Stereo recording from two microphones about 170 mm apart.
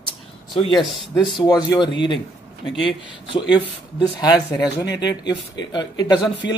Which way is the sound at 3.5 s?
25° left (ahead or behind).